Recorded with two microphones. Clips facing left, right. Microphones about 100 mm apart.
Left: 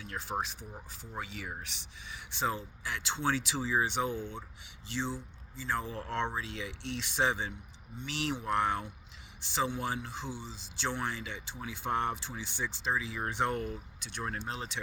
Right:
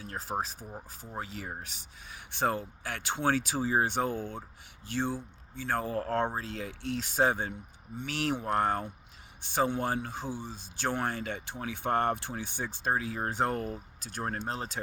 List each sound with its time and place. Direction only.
0.0 s speech: 40° right (ahead or behind)